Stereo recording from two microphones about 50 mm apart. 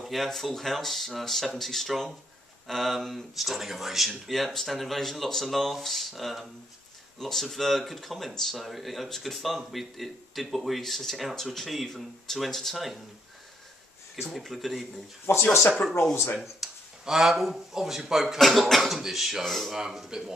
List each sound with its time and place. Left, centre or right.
0.0 s speech: centre
14.2 s speech: centre
15.3 s speech: left
16.3 s speech: centre
19.8 s speech: centre